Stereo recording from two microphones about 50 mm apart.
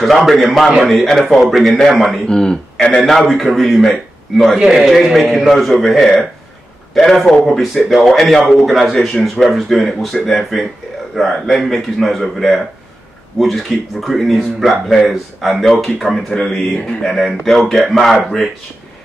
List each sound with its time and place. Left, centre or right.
0.0 s speech: centre
2.2 s speech: centre
3.0 s a man's voice: centre